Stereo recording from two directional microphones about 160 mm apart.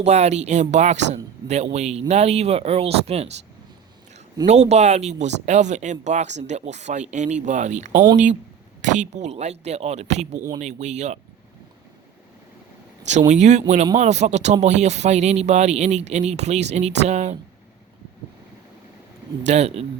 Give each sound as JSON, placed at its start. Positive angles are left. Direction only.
{"t": 0.0, "sound": "speech", "side_deg": -45}
{"t": 4.4, "sound": "speech", "side_deg": -45}
{"t": 10.3, "sound": "speech", "side_deg": -25}
{"t": 10.6, "sound": "speech", "side_deg": -45}
{"t": 13.1, "sound": "speech", "side_deg": -45}
{"t": 19.4, "sound": "speech", "side_deg": -45}